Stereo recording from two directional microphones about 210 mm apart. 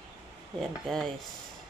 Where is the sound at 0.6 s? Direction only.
Centre (ahead or behind).